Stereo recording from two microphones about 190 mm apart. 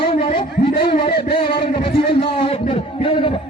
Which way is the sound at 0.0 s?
30° left (ahead or behind).